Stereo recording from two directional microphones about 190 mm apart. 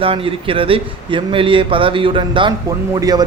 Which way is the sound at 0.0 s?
30° right (ahead or behind).